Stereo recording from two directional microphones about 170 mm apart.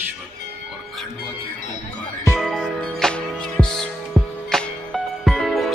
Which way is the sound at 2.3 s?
Centre (ahead or behind).